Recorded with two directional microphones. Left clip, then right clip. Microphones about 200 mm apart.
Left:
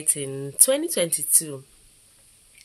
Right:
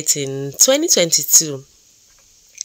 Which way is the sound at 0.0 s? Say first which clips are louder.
Right 9 dB; 35° right (ahead or behind).